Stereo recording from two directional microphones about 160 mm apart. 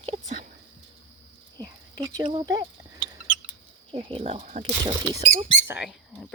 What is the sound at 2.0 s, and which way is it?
Speech, 20° right (ahead or behind).